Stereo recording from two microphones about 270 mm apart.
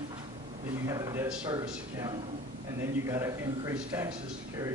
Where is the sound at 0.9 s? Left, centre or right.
Centre.